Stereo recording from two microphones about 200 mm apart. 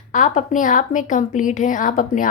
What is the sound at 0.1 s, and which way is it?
A woman's voice, 40° left (ahead or behind).